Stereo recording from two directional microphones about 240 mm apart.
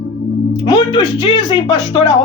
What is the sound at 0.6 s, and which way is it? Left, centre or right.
Speech, centre.